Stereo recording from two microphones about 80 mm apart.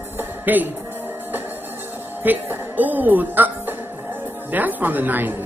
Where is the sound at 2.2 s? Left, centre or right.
Right.